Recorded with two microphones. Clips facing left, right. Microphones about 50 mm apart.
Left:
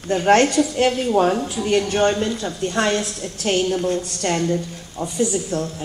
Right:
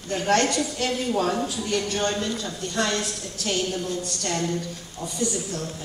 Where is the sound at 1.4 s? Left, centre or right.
Left.